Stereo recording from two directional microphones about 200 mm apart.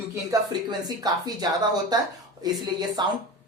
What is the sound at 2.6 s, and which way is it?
Speech, 20° right (ahead or behind).